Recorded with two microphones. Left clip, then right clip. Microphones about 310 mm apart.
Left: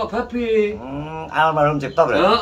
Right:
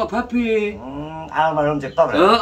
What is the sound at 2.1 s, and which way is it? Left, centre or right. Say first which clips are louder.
Speech: right 3 dB; centre.